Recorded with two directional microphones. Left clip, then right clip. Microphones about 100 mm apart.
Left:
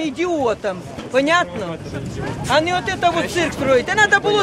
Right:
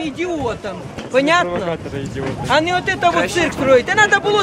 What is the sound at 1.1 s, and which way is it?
Speech, centre (ahead or behind).